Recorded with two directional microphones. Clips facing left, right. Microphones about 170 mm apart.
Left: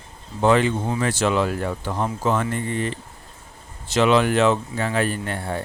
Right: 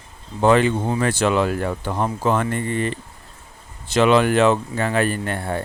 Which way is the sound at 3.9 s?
55° right (ahead or behind).